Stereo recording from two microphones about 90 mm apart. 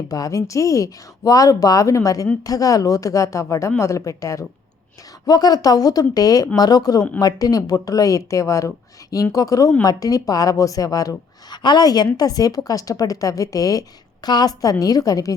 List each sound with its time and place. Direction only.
0.1 s speech: 40° left (ahead or behind)
5.2 s a woman's voice: 45° left (ahead or behind)
11.5 s a woman's voice: 55° left (ahead or behind)